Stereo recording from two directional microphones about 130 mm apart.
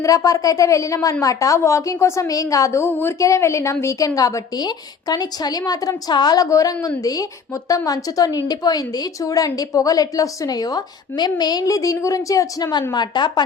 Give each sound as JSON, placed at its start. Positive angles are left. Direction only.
{"t": 0.0, "sound": "a woman's voice", "side_deg": 25}